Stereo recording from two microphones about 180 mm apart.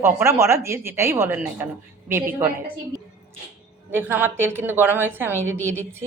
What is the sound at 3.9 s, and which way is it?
A woman's voice, 10° right (ahead or behind).